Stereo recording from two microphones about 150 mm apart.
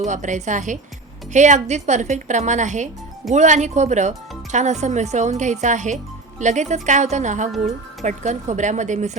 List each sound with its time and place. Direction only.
0.0 s a woman's voice: 55° right (ahead or behind)